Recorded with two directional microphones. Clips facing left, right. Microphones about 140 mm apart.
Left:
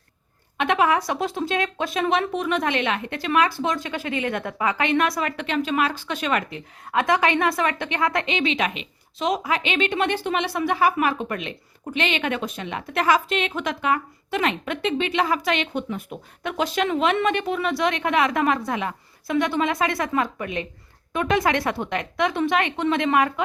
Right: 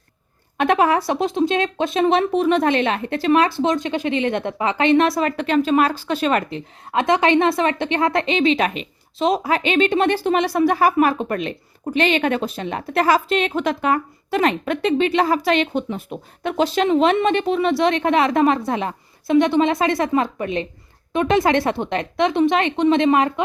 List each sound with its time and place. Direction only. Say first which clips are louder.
0.5 s a woman's voice: right 4 dB; 40° right (ahead or behind)